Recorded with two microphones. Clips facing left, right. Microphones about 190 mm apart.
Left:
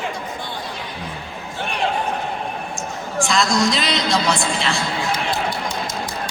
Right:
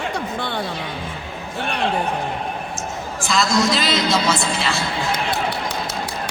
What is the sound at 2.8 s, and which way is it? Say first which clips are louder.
A man's voice: left 3 dB; centre (ahead or behind).